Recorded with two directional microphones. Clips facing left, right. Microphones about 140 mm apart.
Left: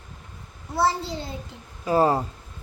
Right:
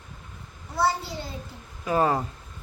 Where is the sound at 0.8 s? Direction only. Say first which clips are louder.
Left 2 dB; 25° left (ahead or behind).